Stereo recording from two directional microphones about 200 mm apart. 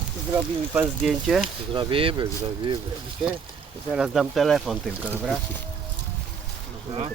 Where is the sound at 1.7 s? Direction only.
25° right (ahead or behind).